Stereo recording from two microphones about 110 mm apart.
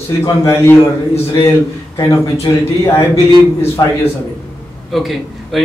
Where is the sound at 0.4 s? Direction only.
25° left (ahead or behind).